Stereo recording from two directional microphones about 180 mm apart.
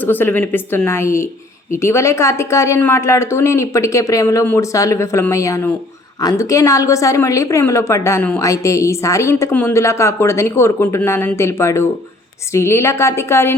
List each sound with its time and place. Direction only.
0.0 s a woman's voice: 10° left (ahead or behind)